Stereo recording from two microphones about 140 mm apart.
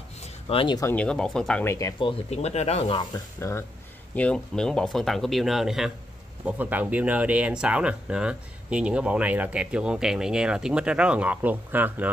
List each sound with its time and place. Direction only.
0.2 s a sound: 40° left (ahead or behind)
0.9 s speech: 5° left (ahead or behind)
1.6 s speech: 20° left (ahead or behind)
2.0 s speech: 45° left (ahead or behind)
3.3 s speech: 20° left (ahead or behind); by 12.1 s 15° right (ahead or behind)